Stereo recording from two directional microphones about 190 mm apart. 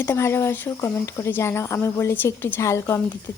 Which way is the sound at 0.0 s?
15° left (ahead or behind).